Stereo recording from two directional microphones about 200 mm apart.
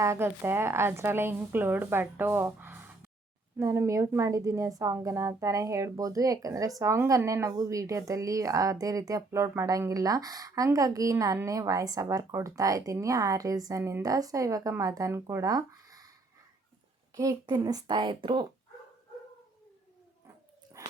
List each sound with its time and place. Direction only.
0.0 s a woman's voice: 15° right (ahead or behind)
17.2 s a woman's voice: 20° right (ahead or behind)